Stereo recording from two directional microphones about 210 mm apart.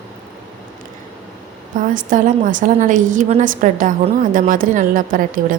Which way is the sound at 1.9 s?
40° right (ahead or behind).